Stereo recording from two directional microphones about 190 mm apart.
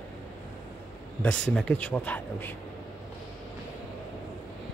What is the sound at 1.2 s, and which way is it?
Speech, 5° left (ahead or behind).